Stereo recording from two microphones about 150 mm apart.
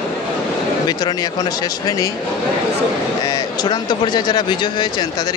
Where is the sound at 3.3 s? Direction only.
25° left (ahead or behind).